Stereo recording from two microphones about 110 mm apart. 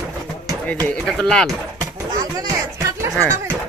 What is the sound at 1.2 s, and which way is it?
Speech, 10° left (ahead or behind).